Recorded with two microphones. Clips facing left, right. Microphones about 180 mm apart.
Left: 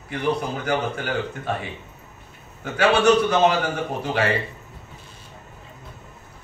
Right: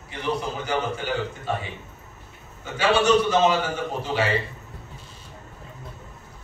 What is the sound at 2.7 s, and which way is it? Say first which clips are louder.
Speech: left 2 dB; 55° left (ahead or behind).